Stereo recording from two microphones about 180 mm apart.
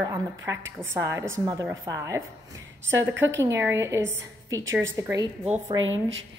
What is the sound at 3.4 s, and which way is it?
A woman's voice, 15° right (ahead or behind).